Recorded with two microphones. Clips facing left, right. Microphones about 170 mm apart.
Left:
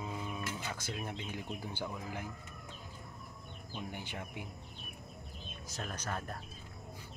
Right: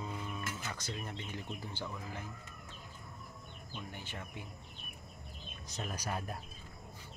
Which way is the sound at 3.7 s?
15° left (ahead or behind).